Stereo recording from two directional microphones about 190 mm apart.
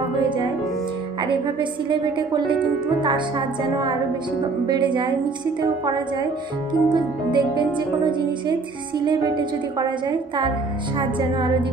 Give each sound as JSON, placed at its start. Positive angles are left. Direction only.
{"t": 1.2, "sound": "music", "side_deg": -25}
{"t": 6.7, "sound": "music", "side_deg": -25}